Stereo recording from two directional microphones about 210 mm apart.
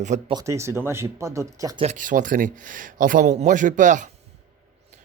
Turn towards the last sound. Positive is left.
turn(degrees=-35)  # may be behind; listen again after turning